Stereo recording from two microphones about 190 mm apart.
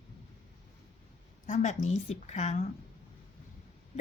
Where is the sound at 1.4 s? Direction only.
40° left (ahead or behind).